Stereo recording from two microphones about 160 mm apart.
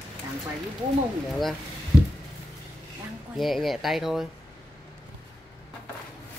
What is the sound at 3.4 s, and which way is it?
Speech, centre (ahead or behind).